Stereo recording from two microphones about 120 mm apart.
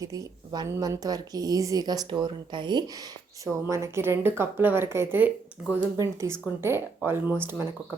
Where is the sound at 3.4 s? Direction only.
25° right (ahead or behind).